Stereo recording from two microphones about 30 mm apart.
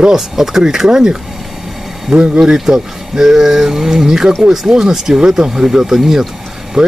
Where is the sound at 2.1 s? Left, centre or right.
Right.